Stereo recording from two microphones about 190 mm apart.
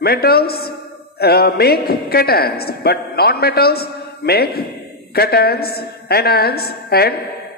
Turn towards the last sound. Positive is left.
turn(degrees=55)  # may be behind; listen again after turning